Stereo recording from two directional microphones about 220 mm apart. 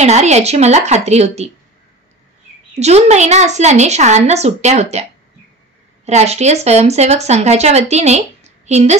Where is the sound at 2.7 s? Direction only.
30° right (ahead or behind).